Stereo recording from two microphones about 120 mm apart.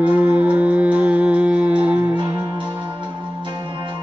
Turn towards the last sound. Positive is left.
turn(degrees=-40)  # may be behind; listen again after turning